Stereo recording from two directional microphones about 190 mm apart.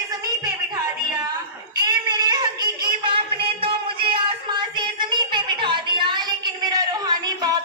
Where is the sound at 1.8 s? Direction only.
20° right (ahead or behind).